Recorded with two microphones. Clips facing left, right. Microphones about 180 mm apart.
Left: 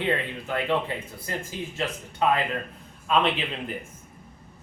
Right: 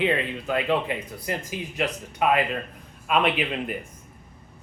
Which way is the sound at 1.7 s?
15° right (ahead or behind).